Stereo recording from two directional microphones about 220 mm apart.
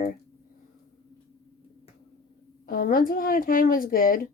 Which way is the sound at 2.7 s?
40° left (ahead or behind).